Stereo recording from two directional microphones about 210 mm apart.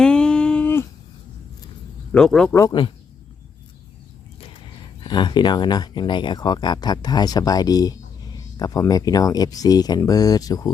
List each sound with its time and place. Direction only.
0.0 s a sound: 5° left (ahead or behind)
2.1 s speech: 5° left (ahead or behind)
2.6 s speech: 20° left (ahead or behind)
5.0 s speech: 20° left (ahead or behind)